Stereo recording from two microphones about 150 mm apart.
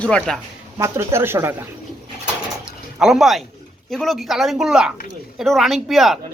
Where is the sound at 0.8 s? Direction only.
20° right (ahead or behind).